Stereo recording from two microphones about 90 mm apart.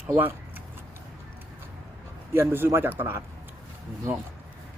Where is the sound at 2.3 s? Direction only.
25° right (ahead or behind).